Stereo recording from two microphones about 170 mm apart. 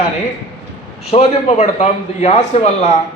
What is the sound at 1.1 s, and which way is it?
A man's voice, 40° left (ahead or behind).